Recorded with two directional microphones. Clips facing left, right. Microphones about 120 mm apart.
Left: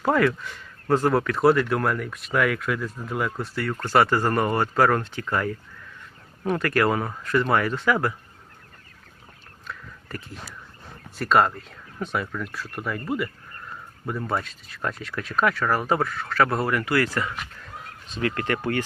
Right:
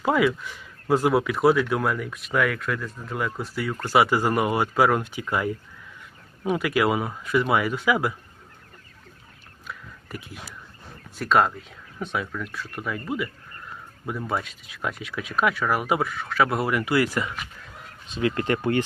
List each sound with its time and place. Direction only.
0.0 s speech: 5° right (ahead or behind)
9.6 s whispering: 10° right (ahead or behind)
11.2 s speech: centre (ahead or behind)
17.3 s speech: 5° right (ahead or behind)
18.2 s speech: 20° right (ahead or behind)